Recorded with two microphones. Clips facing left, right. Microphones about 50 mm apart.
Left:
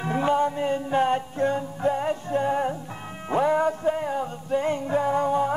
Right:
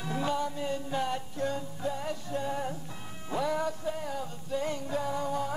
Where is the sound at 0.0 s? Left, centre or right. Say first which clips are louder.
Left 9 dB; left.